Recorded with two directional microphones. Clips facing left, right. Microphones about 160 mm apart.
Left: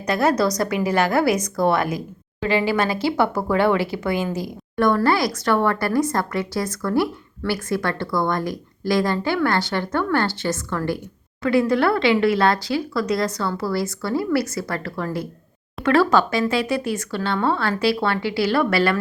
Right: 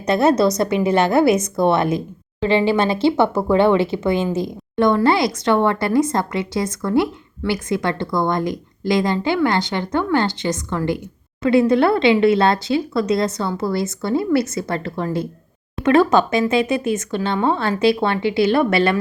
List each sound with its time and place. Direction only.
0.0 s speech: 25° right (ahead or behind)